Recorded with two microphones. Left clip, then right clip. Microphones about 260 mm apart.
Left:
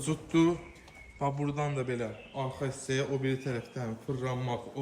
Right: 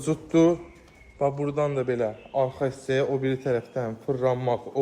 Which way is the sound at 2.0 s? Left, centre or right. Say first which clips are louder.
Right 11 dB; right.